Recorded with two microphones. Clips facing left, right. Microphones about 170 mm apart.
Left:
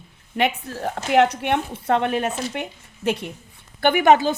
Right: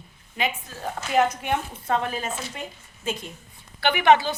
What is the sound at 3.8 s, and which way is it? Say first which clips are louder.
Speech: left 3 dB; 45° left (ahead or behind).